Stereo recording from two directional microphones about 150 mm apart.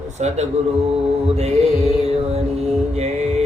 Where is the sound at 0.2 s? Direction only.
50° right (ahead or behind).